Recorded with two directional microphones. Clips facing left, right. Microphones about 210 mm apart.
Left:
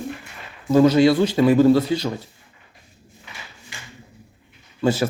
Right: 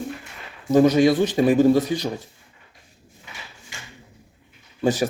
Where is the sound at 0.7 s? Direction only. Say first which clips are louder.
Left 1 dB; 20° right (ahead or behind).